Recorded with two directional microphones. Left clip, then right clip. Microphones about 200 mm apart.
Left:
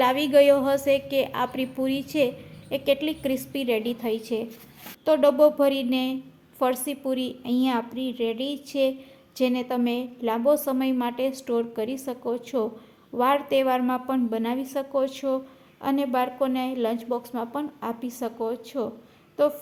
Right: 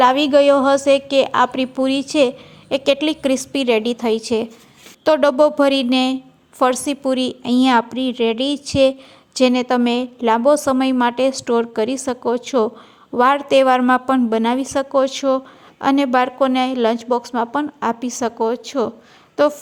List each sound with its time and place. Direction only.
0.0 s a woman's voice: 25° right (ahead or behind)